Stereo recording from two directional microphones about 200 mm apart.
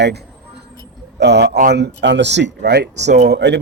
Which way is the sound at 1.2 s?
60° right (ahead or behind).